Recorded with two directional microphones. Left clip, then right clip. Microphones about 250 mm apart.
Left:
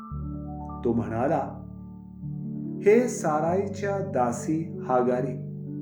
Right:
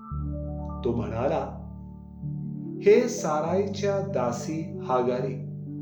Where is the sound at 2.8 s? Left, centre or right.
Left.